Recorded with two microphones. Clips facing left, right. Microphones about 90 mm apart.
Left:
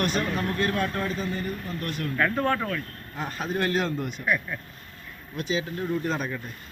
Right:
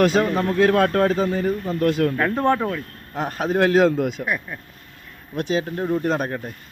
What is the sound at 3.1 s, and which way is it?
Speech, 55° right (ahead or behind).